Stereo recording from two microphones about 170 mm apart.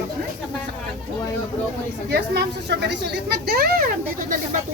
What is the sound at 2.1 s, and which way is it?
Speech, 80° right.